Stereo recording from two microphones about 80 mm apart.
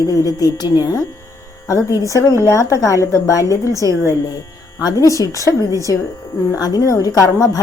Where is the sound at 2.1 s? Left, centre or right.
Left.